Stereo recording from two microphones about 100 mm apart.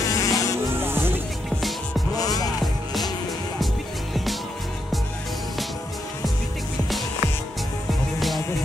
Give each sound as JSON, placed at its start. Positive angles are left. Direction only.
{"t": 0.0, "sound": "insect", "side_deg": 35}
{"t": 0.7, "sound": "music", "side_deg": -20}
{"t": 2.1, "sound": "music", "side_deg": 40}